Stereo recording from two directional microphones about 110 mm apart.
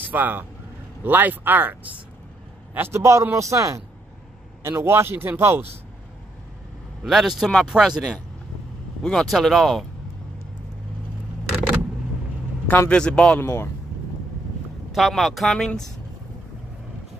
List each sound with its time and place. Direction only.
0.1 s speech: 15° right (ahead or behind)
7.0 s speech: centre (ahead or behind)
12.6 s a man's voice: 15° left (ahead or behind)
13.4 s speech: 25° left (ahead or behind)
14.9 s speech: centre (ahead or behind)